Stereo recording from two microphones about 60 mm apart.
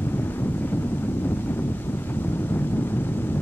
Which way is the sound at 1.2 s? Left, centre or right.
Left.